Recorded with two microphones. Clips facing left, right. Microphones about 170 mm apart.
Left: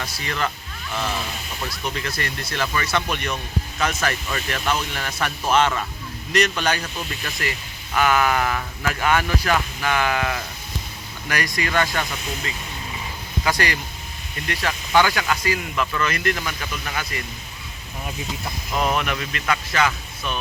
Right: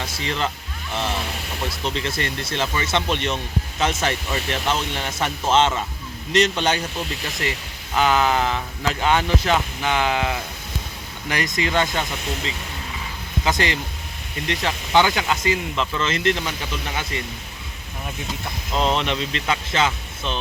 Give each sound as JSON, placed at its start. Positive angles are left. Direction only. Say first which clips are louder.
{"t": 0.0, "sound": "speech", "louder": "right 1 dB", "side_deg": -20}
{"t": 7.9, "sound": "speech", "louder": "right 1 dB", "side_deg": -20}
{"t": 13.4, "sound": "speech", "louder": "right 1 dB", "side_deg": -20}
{"t": 18.7, "sound": "speech", "louder": "right 1 dB", "side_deg": -25}